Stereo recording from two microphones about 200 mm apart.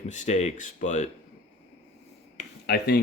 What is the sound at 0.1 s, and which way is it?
Speech, 35° left (ahead or behind).